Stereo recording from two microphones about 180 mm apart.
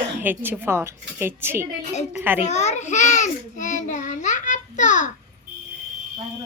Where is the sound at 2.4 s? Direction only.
40° left (ahead or behind).